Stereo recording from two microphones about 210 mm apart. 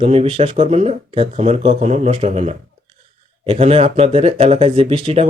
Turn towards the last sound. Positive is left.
turn(degrees=-30)  # may be behind; listen again after turning